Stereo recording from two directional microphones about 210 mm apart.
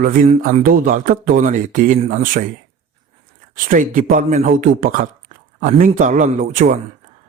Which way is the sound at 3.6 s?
40° right (ahead or behind).